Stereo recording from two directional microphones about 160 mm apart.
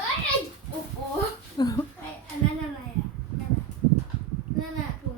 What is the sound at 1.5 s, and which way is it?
Speech, 25° left (ahead or behind).